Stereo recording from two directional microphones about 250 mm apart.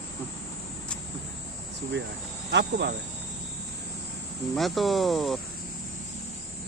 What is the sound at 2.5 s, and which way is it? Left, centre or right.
Speech, right.